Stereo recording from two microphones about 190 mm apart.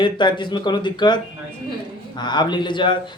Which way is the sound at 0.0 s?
25° left (ahead or behind).